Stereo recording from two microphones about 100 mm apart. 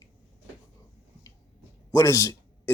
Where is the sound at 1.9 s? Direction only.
30° left (ahead or behind).